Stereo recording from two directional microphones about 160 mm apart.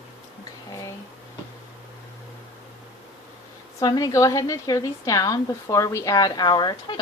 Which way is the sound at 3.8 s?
25° left (ahead or behind).